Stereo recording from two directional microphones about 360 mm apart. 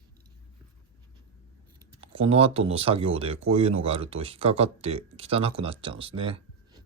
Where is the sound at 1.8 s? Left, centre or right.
Centre.